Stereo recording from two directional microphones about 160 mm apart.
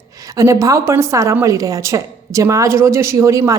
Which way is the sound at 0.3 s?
20° right (ahead or behind).